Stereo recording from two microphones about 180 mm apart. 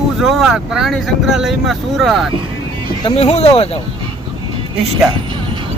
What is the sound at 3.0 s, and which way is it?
Speech, 30° left (ahead or behind).